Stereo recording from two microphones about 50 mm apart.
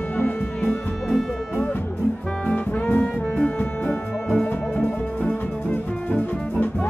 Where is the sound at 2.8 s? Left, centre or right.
Left.